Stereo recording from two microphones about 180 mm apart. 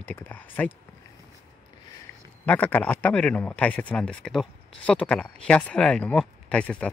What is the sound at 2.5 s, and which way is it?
Speech, 10° left (ahead or behind).